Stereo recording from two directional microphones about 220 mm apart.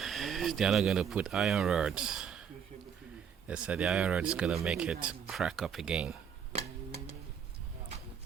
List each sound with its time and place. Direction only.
0.0 s speech: centre (ahead or behind)
3.4 s speech: 5° right (ahead or behind)
6.5 s music: 30° right (ahead or behind)